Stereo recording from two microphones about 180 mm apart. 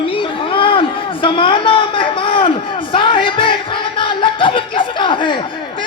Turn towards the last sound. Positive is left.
turn(degrees=25)  # may be behind; listen again after turning